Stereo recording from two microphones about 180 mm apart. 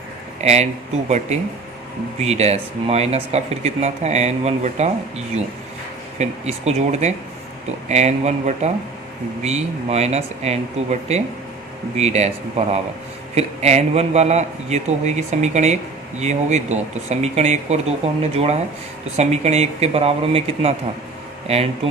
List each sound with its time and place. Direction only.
0.4 s speech: 35° right (ahead or behind)